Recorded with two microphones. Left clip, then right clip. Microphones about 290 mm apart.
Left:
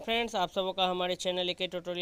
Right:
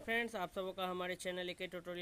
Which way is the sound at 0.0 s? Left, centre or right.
Left.